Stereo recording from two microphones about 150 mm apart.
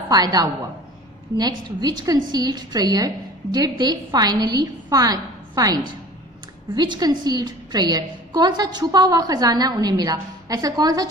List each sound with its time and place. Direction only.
0.1 s a woman's voice: 25° right (ahead or behind)